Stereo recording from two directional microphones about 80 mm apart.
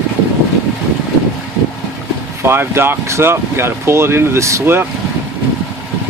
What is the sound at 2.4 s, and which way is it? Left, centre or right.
Speech, right.